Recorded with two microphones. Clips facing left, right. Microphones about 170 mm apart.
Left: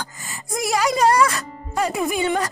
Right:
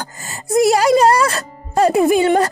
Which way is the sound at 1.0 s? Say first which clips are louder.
Right 3 dB; 65° right (ahead or behind).